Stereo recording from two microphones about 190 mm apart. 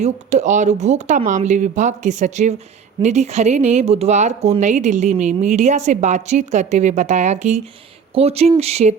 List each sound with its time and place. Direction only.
0.0 s speech: 40° right (ahead or behind)